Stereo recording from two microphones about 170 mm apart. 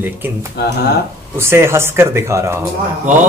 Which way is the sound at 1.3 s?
15° right (ahead or behind).